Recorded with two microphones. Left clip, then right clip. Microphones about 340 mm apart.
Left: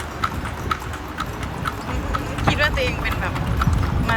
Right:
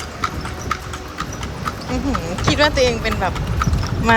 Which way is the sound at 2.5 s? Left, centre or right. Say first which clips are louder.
Right 5 dB; centre.